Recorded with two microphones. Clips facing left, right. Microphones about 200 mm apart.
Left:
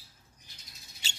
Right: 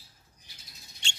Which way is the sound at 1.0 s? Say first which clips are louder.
Right 3 dB; 5° left (ahead or behind).